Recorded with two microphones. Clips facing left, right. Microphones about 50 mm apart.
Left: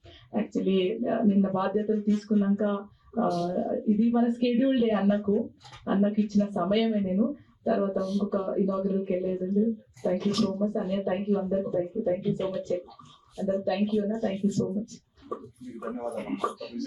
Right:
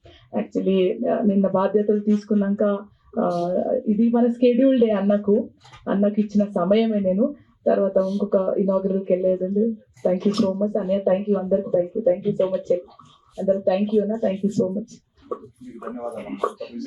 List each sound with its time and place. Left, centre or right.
0.5 s speech: centre
1.9 s speech: right
2.3 s speech: centre
3.2 s speech: right
3.5 s speech: centre
7.9 s speech: right
8.2 s speech: centre
14.6 s speech: centre